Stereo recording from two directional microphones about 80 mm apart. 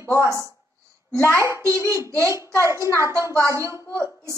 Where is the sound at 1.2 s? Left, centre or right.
Left.